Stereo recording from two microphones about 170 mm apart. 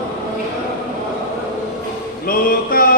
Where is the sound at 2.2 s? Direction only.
55° left (ahead or behind).